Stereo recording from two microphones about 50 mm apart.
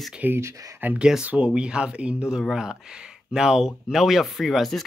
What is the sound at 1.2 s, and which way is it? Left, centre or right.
Speech, right.